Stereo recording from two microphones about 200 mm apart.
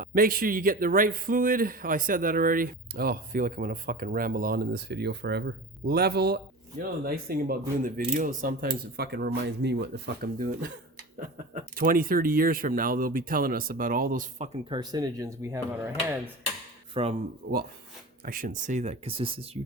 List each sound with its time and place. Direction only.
0.0 s a man's voice: 45° right (ahead or behind)
9.0 s a man's voice: 55° right (ahead or behind); by 14.5 s 40° right (ahead or behind)
14.7 s speech: 20° right (ahead or behind)
16.9 s speech: 30° right (ahead or behind)
17.4 s a man's voice: 50° right (ahead or behind); by 19.5 s 25° right (ahead or behind)